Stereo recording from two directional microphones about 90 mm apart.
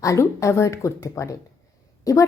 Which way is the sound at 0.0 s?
35° left (ahead or behind).